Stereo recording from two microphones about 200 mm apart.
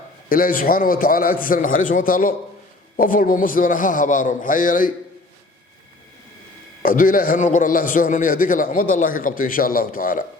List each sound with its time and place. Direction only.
0.3 s a man's voice: 45° left (ahead or behind)
6.8 s a man's voice: 45° left (ahead or behind)